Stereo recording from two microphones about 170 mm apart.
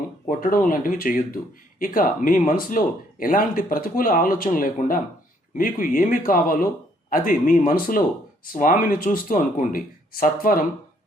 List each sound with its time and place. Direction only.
0.3 s speech: 55° left (ahead or behind)